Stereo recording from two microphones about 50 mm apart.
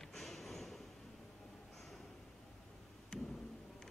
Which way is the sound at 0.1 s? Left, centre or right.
Centre.